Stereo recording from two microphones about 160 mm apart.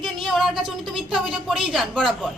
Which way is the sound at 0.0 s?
Centre (ahead or behind).